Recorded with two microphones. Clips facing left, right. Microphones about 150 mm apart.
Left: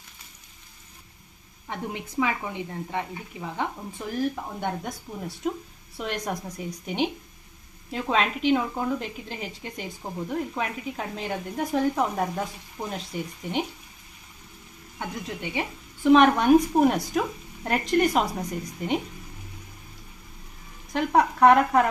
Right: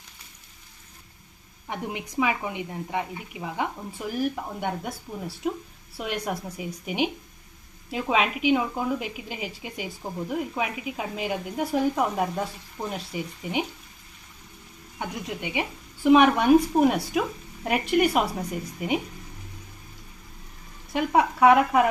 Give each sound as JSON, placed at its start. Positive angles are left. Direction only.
{"t": 1.7, "sound": "a woman's voice", "side_deg": -15}
{"t": 14.9, "sound": "a woman's voice", "side_deg": -15}
{"t": 20.9, "sound": "speech", "side_deg": -5}